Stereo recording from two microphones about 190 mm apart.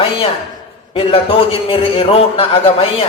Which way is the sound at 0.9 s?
30° left (ahead or behind).